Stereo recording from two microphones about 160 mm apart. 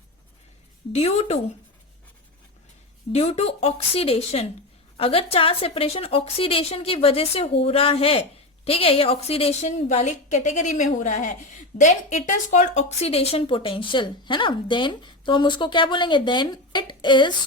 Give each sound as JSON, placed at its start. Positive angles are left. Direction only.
{"t": 0.9, "sound": "a woman's voice", "side_deg": 40}
{"t": 3.1, "sound": "a woman's voice", "side_deg": 40}